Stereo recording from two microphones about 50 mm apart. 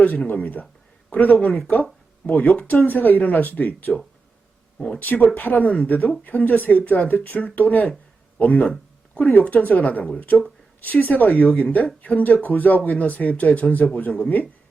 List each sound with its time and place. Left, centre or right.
0.0 s speech: left
4.9 s speech: left